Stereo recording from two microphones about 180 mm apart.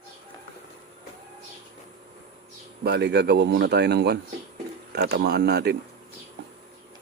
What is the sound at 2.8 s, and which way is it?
Speech, 65° right (ahead or behind).